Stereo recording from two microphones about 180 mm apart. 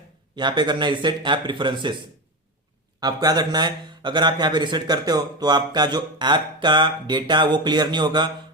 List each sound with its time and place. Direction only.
0.3 s a man's voice: 25° right (ahead or behind)
3.0 s a man's voice: 20° right (ahead or behind)